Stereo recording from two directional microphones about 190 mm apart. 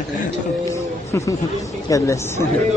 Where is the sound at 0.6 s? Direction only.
15° left (ahead or behind).